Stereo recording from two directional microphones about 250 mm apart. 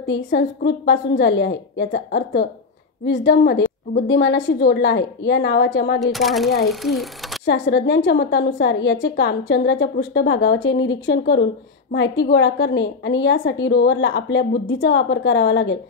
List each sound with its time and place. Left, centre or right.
0.0 s a woman's voice: left
6.1 s speech: centre
7.4 s a woman's voice: left